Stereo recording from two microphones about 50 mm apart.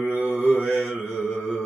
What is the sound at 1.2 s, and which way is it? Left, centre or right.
Mantra, left.